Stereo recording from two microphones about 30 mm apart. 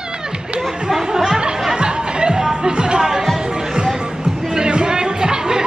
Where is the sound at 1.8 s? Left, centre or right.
Right.